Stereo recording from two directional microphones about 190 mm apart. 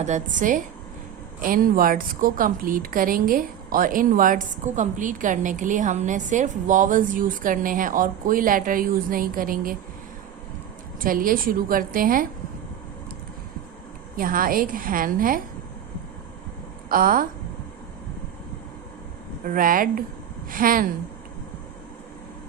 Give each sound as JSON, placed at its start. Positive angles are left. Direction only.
{"t": 0.0, "sound": "speech", "side_deg": -40}
{"t": 11.0, "sound": "speech", "side_deg": -50}
{"t": 14.2, "sound": "speech", "side_deg": -45}
{"t": 16.9, "sound": "speech", "side_deg": -50}
{"t": 19.5, "sound": "speech", "side_deg": -45}